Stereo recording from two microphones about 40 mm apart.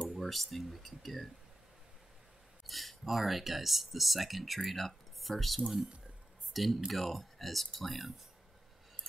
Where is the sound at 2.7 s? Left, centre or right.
Centre.